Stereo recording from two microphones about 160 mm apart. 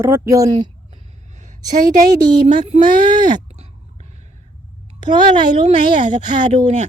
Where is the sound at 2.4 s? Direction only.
45° right (ahead or behind).